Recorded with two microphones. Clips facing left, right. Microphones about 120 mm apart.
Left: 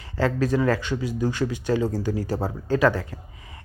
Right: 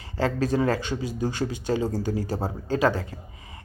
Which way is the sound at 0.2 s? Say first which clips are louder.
Left 1 dB; 30° right (ahead or behind).